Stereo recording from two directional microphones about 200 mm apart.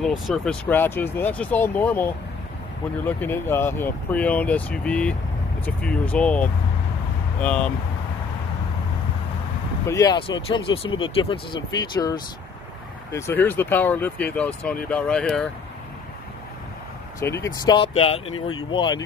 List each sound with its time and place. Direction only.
0.0 s speech: centre (ahead or behind)
9.8 s speech: 15° left (ahead or behind)
13.1 s speech: 10° left (ahead or behind)
17.2 s speech: 15° left (ahead or behind)
17.9 s speech: 30° left (ahead or behind)
18.3 s speech: 90° left
18.7 s speech: 25° left (ahead or behind)